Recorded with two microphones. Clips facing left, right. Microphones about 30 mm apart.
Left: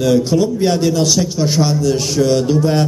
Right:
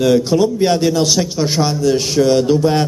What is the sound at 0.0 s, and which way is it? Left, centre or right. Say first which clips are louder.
A man's voice: right 1 dB; centre.